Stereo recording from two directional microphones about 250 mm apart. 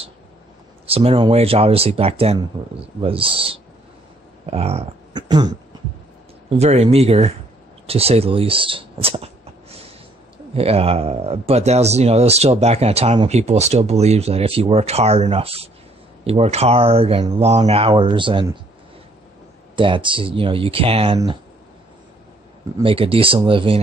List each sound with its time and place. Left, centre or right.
0.8 s speech: right
6.6 s speech: right
7.8 s a sound: right
10.5 s speech: right
19.7 s speech: centre
22.8 s speech: right